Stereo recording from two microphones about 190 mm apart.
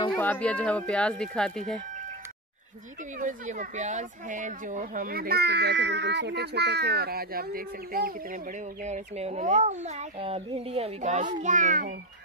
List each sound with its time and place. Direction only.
0.1 s speech: 10° left (ahead or behind)
3.2 s speech: 40° right (ahead or behind)
8.8 s speech: 35° right (ahead or behind)